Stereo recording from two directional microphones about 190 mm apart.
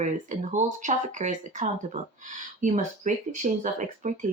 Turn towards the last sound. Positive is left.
turn(degrees=-40)  # may be behind; listen again after turning